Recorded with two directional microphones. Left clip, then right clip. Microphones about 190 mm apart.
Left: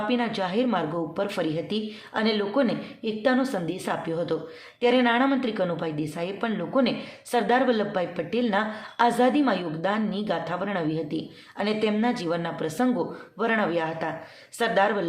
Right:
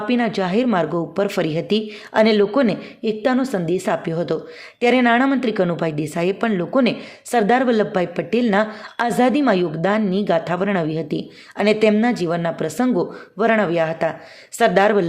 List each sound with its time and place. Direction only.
0.1 s a woman's voice: 35° right (ahead or behind)